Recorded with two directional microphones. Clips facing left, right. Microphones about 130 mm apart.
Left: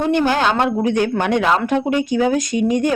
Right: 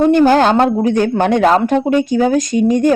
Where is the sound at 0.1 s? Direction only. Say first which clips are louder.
Right 7 dB; 40° right (ahead or behind).